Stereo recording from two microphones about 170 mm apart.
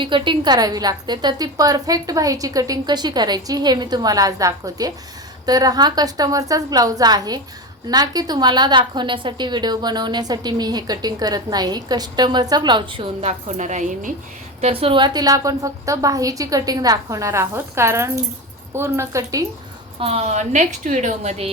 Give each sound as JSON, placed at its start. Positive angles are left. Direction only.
{"t": 0.0, "sound": "a woman's voice", "side_deg": -30}
{"t": 14.6, "sound": "a woman's voice", "side_deg": -35}
{"t": 20.0, "sound": "a woman's voice", "side_deg": -35}